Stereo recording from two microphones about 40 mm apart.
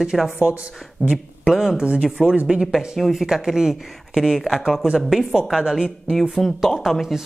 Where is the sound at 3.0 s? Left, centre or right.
Centre.